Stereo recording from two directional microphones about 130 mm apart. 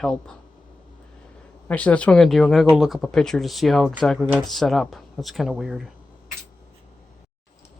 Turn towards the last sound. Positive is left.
turn(degrees=0)  # may be behind; listen again after turning